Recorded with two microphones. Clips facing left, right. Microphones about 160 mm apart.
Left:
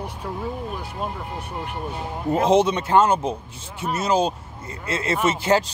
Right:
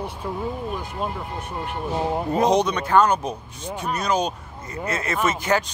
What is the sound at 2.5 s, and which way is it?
A man's voice, 25° left (ahead or behind).